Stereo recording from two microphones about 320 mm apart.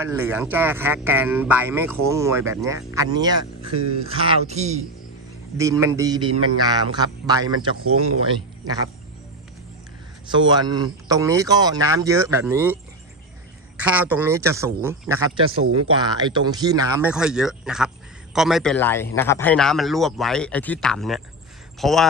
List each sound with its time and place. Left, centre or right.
0.0 s speech: centre
5.5 s speech: centre
10.2 s speech: centre
15.6 s speech: right
16.1 s a man's voice: centre